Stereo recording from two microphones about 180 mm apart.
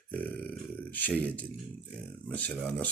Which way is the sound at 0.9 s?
10° left (ahead or behind).